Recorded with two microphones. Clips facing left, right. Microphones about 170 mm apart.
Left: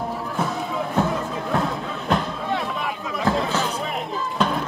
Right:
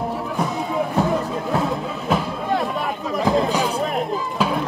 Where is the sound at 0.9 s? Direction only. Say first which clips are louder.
Right 1 dB; centre (ahead or behind).